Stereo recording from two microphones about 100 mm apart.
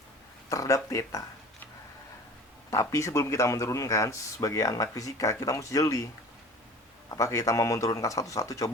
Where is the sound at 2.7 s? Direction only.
30° left (ahead or behind).